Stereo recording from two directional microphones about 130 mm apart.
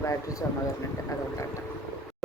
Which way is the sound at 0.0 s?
25° left (ahead or behind).